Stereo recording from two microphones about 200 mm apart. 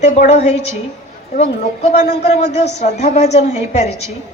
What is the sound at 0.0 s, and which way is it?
Speech, 35° left (ahead or behind).